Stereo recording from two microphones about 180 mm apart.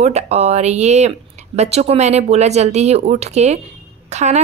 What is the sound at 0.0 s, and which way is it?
A woman's voice, 35° right (ahead or behind).